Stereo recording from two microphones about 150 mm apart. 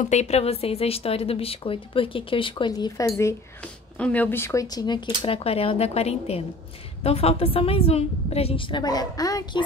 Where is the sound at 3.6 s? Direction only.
10° left (ahead or behind); by 9.6 s 25° left (ahead or behind).